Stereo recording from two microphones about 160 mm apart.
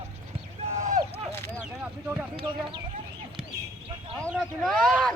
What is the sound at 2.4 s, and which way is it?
Speech, 30° right (ahead or behind).